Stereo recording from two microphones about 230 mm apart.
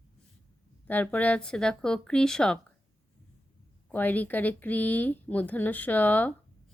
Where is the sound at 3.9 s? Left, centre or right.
Centre.